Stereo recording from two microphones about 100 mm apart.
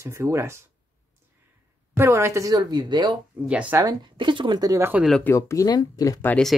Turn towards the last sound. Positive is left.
turn(degrees=40)  # may be behind; listen again after turning